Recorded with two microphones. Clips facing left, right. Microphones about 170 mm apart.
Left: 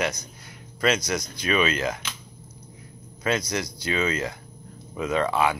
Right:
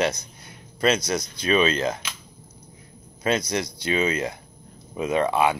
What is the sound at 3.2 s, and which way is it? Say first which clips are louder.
Speech: right 2 dB; 25° right (ahead or behind).